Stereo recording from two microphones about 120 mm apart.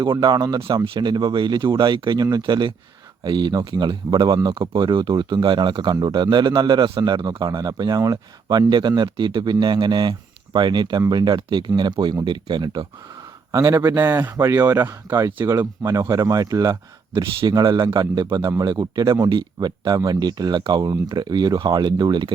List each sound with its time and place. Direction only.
0.0 s speech: 40° right (ahead or behind)
13.5 s a man's voice: 25° right (ahead or behind)